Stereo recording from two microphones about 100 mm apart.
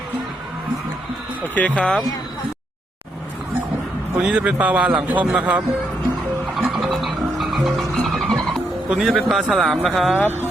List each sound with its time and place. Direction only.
1.5 s speech: 15° left (ahead or behind)
4.2 s a man's voice: 10° right (ahead or behind)
6.7 s music: centre (ahead or behind)
10.2 s speech: 20° left (ahead or behind)